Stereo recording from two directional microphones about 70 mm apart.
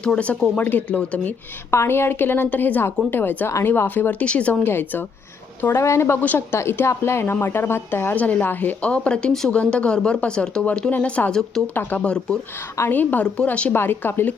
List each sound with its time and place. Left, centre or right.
0.0 s a woman's voice: centre
0.6 s speech: left
1.7 s a woman's voice: left; by 4.5 s centre
4.6 s a woman's voice: left
5.7 s a woman's voice: left
6.2 s speech: left
6.6 s a woman's voice: left
8.1 s a woman's voice: left
12.9 s a woman's voice: left
13.7 s speech: left